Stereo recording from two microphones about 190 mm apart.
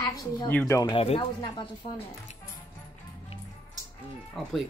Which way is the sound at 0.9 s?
30° left (ahead or behind).